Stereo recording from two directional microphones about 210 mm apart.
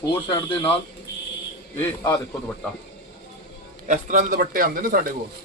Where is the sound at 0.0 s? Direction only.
20° left (ahead or behind).